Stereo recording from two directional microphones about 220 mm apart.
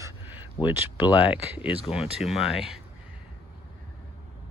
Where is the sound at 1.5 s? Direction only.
5° right (ahead or behind).